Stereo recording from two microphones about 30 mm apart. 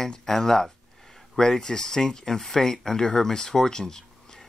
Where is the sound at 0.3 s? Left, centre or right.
Centre.